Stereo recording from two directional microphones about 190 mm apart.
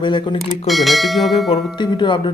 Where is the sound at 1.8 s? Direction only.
25° left (ahead or behind).